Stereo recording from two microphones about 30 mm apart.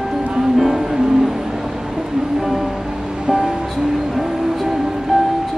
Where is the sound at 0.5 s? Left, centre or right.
Centre.